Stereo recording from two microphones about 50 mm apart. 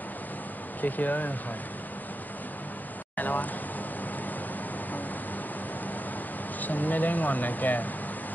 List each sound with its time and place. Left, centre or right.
0.7 s speech: left
3.2 s speech: left
6.6 s speech: left